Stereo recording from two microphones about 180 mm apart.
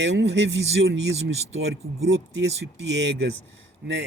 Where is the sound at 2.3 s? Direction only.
75° right (ahead or behind).